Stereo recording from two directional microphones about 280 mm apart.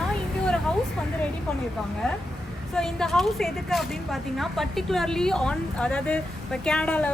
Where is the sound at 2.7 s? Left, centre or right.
Centre.